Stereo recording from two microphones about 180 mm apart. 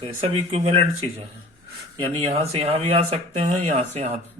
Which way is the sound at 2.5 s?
35° right (ahead or behind).